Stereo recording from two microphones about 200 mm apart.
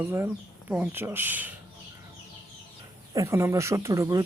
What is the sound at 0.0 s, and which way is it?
Speech, 10° right (ahead or behind).